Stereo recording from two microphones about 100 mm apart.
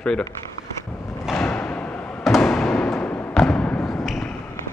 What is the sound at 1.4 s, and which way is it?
Thump, 10° left (ahead or behind).